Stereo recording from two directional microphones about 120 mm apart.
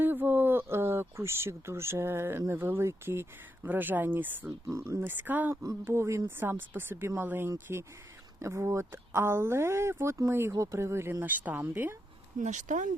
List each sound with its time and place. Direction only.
0.0 s a sound: 15° right (ahead or behind)
2.5 s speech: 20° right (ahead or behind)
12.4 s speech: 90° right